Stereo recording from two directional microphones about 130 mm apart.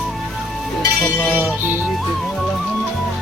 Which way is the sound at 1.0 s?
15° left (ahead or behind).